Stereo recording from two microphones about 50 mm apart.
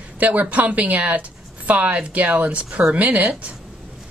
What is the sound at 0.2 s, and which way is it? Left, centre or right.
Speech, right.